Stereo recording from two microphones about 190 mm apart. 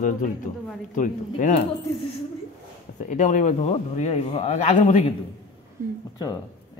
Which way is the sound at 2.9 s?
40° left (ahead or behind).